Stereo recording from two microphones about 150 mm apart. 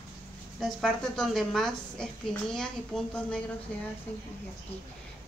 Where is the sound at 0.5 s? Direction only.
Centre (ahead or behind).